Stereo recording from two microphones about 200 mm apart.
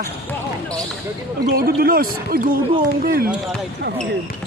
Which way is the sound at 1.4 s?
50° right (ahead or behind).